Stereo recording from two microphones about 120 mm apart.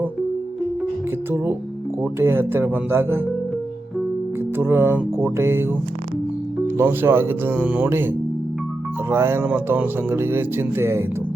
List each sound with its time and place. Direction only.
2.0 s speech: 20° right (ahead or behind)
4.5 s speech: 20° right (ahead or behind)